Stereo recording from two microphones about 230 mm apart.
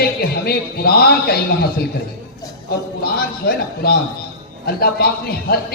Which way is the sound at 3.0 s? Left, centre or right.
Left.